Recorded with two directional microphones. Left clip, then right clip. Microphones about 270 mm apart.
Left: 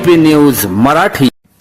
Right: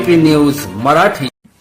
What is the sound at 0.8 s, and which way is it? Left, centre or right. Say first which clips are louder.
Speech: left 1 dB; left.